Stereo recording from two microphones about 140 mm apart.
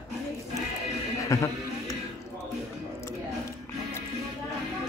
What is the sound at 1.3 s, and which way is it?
Speech, 25° left (ahead or behind).